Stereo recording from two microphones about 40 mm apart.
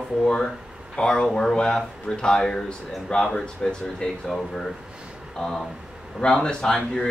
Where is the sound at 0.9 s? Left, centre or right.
Centre.